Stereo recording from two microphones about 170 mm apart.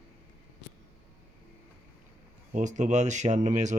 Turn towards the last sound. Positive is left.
turn(degrees=-45)  # may be behind; listen again after turning